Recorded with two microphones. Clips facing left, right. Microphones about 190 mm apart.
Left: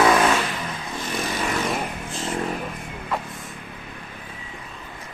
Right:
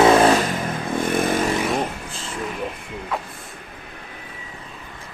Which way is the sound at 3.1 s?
Centre (ahead or behind).